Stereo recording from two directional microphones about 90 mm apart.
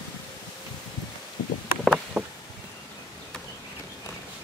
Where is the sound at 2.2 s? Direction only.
20° right (ahead or behind).